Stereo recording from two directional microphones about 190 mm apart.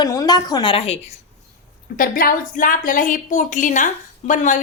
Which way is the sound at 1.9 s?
50° left (ahead or behind).